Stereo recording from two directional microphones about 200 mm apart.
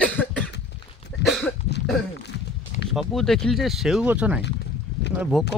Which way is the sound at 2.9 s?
Centre (ahead or behind).